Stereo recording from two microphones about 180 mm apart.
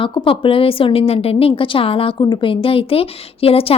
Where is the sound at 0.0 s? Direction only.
30° left (ahead or behind).